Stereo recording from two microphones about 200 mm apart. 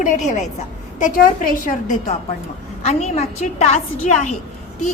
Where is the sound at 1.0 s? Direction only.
40° left (ahead or behind).